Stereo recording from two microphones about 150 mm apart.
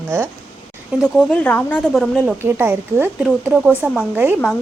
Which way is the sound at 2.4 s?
15° right (ahead or behind).